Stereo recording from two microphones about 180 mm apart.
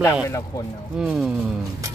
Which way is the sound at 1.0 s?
5° right (ahead or behind).